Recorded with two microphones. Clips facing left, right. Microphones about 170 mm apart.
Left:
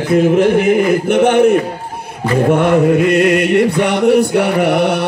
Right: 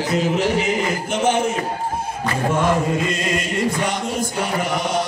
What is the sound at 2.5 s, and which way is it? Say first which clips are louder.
Mantra: left 8 dB; 65° left (ahead or behind).